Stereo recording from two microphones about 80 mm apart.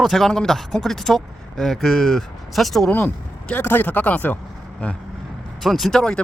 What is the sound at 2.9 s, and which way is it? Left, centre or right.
Speech, centre.